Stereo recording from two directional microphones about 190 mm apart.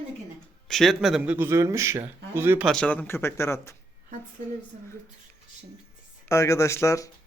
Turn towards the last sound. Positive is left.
turn(degrees=15)  # may be behind; listen again after turning